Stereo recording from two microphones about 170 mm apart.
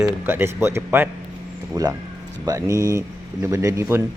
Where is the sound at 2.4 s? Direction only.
20° right (ahead or behind).